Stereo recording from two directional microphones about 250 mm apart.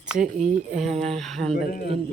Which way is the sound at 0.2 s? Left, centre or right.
Right.